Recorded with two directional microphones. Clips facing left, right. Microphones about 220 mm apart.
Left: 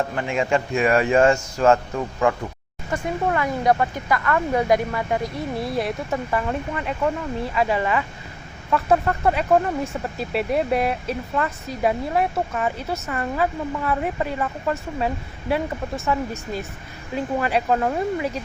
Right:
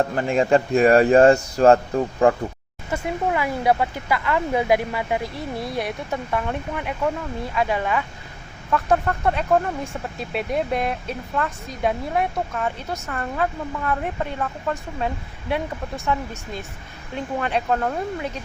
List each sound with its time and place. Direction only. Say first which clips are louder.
0.2 s speech: right 4 dB; 35° right (ahead or behind)
2.9 s speech: even; 10° right (ahead or behind)